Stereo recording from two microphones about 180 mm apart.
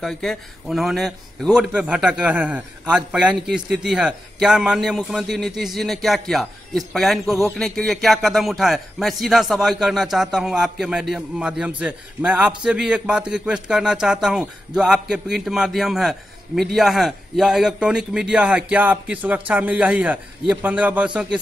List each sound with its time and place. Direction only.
0.0 s a man's voice: centre (ahead or behind)